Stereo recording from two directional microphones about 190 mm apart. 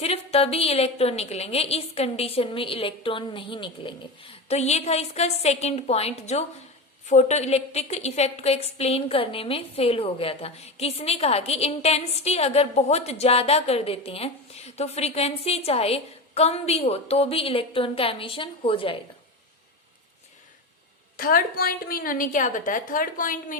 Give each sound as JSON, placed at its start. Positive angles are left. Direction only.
{"t": 0.0, "sound": "a woman's voice", "side_deg": 30}
{"t": 21.2, "sound": "a woman's voice", "side_deg": 50}